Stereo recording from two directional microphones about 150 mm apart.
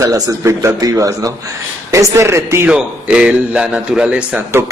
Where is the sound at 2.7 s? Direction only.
5° right (ahead or behind).